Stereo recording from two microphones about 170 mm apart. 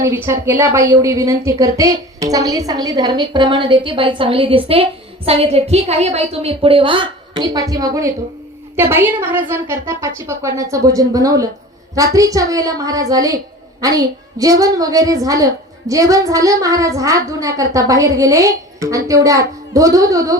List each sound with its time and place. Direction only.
0.0 s a woman's voice: 15° right (ahead or behind)